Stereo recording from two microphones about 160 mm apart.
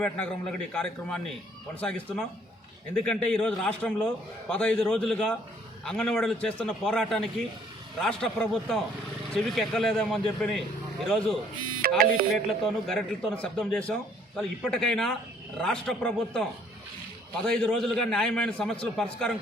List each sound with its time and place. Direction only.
0.0 s a man's voice: 5° left (ahead or behind)
11.9 s music: 65° right (ahead or behind)
12.3 s a man's voice: centre (ahead or behind)